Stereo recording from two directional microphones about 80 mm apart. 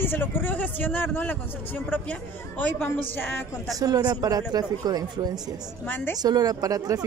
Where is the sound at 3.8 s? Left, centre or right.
Right.